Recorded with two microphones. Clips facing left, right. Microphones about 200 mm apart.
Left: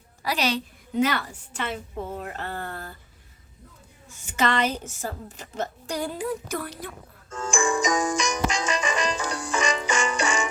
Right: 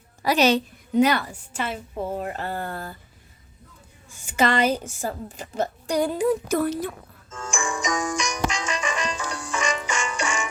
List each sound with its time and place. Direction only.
0.3 s a woman's voice: 25° right (ahead or behind)
2.1 s a woman's voice: 35° right (ahead or behind)
2.5 s speech: 10° right (ahead or behind)
4.1 s a woman's voice: 10° right (ahead or behind)
4.9 s a woman's voice: 30° right (ahead or behind)
5.5 s a woman's voice: 15° right (ahead or behind)
7.3 s music: 35° left (ahead or behind)